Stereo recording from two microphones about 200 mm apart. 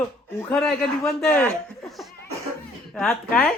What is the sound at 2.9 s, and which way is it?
Speech, centre (ahead or behind).